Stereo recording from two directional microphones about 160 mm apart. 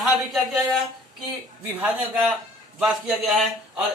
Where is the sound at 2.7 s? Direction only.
5° right (ahead or behind).